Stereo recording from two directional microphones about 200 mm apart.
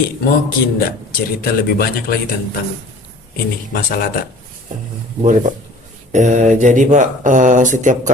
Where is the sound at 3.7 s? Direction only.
45° left (ahead or behind).